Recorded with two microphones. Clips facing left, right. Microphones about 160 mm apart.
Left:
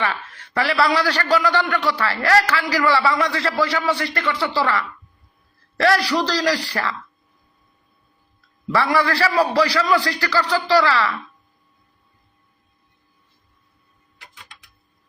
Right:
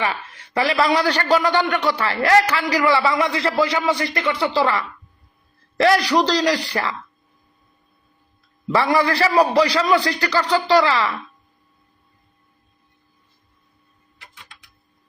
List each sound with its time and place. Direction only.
0.0 s a man's voice: 10° right (ahead or behind)
8.6 s a man's voice: 20° right (ahead or behind)